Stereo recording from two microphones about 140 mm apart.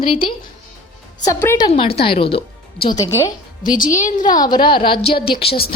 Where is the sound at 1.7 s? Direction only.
40° left (ahead or behind).